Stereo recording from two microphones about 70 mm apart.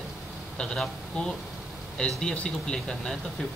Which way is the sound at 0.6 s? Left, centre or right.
Centre.